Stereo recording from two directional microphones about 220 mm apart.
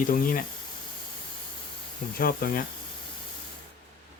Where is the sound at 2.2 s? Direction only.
45° left (ahead or behind).